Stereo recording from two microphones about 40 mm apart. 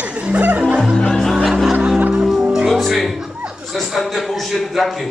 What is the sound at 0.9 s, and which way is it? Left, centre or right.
Speech, centre.